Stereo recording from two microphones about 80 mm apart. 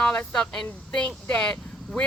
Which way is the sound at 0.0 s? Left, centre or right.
Centre.